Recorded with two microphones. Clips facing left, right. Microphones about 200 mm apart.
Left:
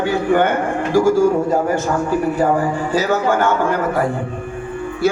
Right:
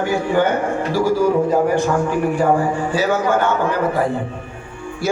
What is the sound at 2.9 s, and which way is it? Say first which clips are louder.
Speech: left 1 dB; 40° left (ahead or behind).